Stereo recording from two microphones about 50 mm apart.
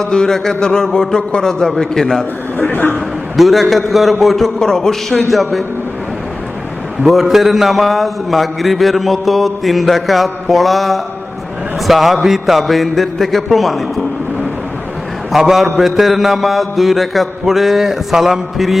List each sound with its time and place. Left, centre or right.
0.0 s a man's voice: centre
2.6 s a man's voice: left
3.3 s a man's voice: centre
7.0 s a man's voice: centre
15.3 s a man's voice: centre